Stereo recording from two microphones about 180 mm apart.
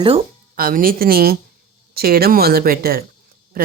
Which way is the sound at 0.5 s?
50° right (ahead or behind).